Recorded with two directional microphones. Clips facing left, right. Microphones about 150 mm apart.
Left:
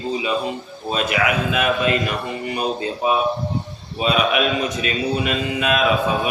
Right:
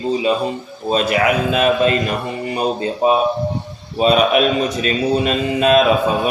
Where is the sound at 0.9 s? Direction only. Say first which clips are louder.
Right 5 dB; 35° right (ahead or behind).